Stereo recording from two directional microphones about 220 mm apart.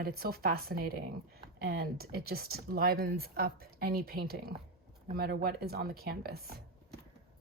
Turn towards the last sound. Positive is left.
turn(degrees=-45)  # may be behind; listen again after turning